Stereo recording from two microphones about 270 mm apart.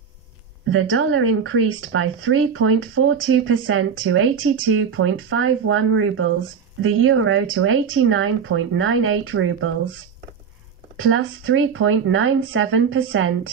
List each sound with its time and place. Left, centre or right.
0.7 s speech: right